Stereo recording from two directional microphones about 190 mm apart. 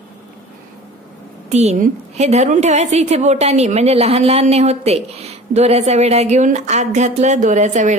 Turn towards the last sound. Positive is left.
turn(degrees=-40)  # may be behind; listen again after turning